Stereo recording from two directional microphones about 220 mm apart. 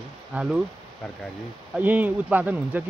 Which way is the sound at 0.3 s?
5° right (ahead or behind).